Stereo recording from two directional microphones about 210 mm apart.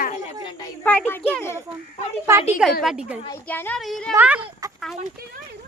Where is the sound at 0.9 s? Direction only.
10° left (ahead or behind).